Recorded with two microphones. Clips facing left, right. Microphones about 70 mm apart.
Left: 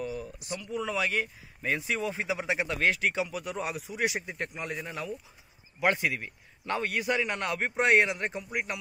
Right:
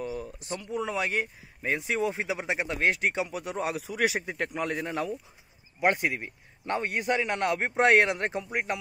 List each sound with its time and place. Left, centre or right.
0.0 s speech: right
2.4 s speech: centre
2.7 s speech: right
4.4 s speech: right
4.8 s a man's voice: right
5.8 s speech: right
7.0 s a man's voice: right
8.5 s speech: right